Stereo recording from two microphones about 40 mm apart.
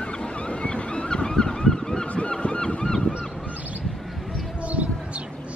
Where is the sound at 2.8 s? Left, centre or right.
Centre.